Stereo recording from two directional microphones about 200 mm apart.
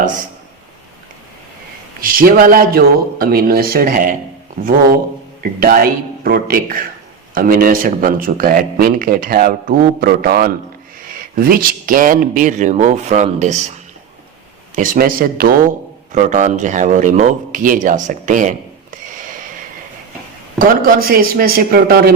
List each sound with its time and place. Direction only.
2.0 s a man's voice: 45° right (ahead or behind)
5.4 s a man's voice: 45° right (ahead or behind)
14.8 s a man's voice: 45° right (ahead or behind)
18.9 s a sound: 40° right (ahead or behind)
20.6 s a man's voice: 45° right (ahead or behind)